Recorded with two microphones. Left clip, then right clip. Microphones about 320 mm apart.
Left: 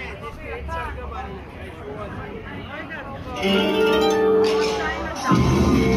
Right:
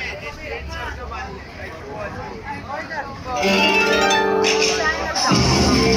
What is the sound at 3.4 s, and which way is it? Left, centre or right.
Harp, right.